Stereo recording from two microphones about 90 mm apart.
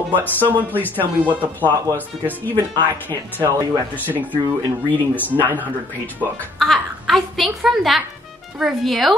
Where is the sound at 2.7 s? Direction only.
55° right (ahead or behind).